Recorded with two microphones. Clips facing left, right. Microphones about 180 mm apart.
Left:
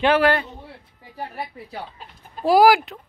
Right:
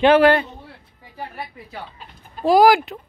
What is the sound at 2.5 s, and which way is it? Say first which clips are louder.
Speech: right 1 dB; 5° left (ahead or behind).